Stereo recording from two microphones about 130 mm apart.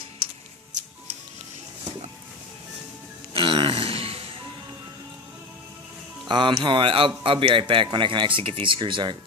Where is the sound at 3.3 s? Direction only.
40° right (ahead or behind).